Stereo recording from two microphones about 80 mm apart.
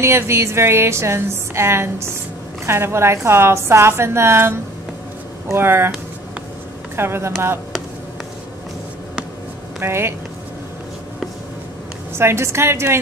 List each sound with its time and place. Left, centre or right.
0.0 s a woman's voice: right
7.0 s a woman's voice: right
9.8 s speech: right
12.2 s a woman's voice: right